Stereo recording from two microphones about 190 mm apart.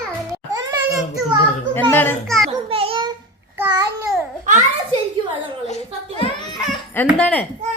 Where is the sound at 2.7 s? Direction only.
30° right (ahead or behind).